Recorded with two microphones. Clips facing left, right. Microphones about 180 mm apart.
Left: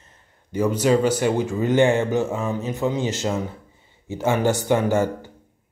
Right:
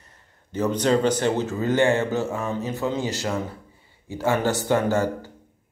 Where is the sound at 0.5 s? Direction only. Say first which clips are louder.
Left 2 dB; 10° left (ahead or behind).